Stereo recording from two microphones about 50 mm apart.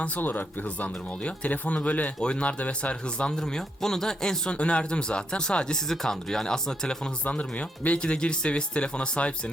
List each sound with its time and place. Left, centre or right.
0.2 s speech: left; by 6.9 s centre
7.9 s speech: centre